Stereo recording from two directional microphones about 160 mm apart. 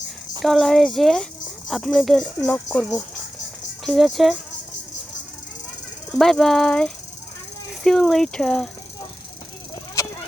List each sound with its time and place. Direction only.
0.4 s speech: centre (ahead or behind)
6.1 s speech: 5° left (ahead or behind)
10.0 s a sound: 20° left (ahead or behind)